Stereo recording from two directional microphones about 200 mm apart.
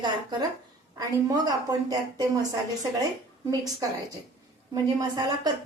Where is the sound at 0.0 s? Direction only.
20° right (ahead or behind).